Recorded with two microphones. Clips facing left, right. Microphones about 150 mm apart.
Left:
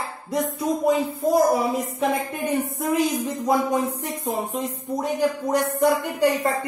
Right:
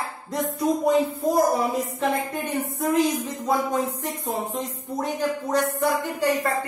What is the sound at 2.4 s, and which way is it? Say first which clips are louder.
Speech: left 2 dB; 10° left (ahead or behind).